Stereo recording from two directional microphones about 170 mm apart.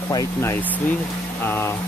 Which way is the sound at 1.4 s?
15° left (ahead or behind).